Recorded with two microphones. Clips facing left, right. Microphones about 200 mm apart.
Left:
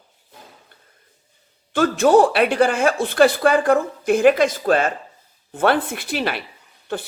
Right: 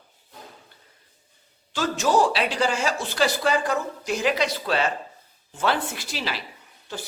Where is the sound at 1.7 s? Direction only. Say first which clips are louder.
Left 7 dB; 55° left (ahead or behind).